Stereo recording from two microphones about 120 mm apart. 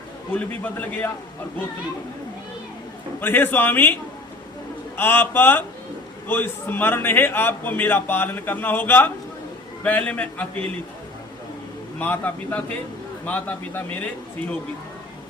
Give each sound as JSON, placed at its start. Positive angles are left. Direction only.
{"t": 0.3, "sound": "a man's voice", "side_deg": 15}
{"t": 3.2, "sound": "a man's voice", "side_deg": 15}
{"t": 4.9, "sound": "a man's voice", "side_deg": 20}
{"t": 11.9, "sound": "a man's voice", "side_deg": 15}